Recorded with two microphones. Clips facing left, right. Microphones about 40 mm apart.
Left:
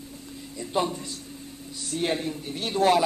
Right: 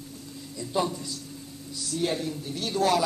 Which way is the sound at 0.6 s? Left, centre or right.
Left.